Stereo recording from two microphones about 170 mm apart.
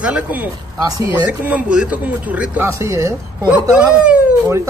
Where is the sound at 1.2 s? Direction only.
10° right (ahead or behind).